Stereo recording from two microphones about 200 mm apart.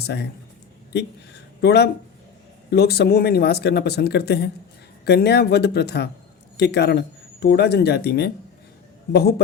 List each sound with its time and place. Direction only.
0.9 s speech: 55° left (ahead or behind)